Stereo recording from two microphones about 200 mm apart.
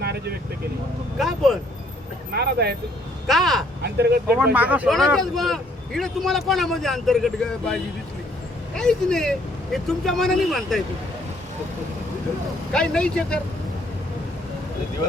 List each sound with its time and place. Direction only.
0.0 s vehicle: 50° right (ahead or behind)
1.2 s speech: centre (ahead or behind)
2.3 s speech: 55° right (ahead or behind)
3.2 s speech: centre (ahead or behind)
3.8 s speech: 55° right (ahead or behind)
4.5 s speech: 5° right (ahead or behind)
12.7 s speech: 5° left (ahead or behind)